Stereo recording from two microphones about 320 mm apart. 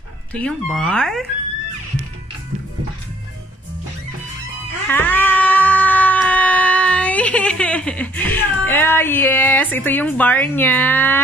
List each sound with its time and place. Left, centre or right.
0.3 s speech: centre
4.8 s cat: centre